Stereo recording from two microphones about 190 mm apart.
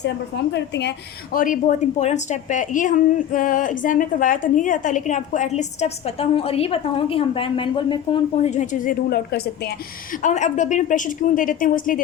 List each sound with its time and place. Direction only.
0.5 s a woman's voice: 65° left (ahead or behind); by 12.0 s 45° left (ahead or behind)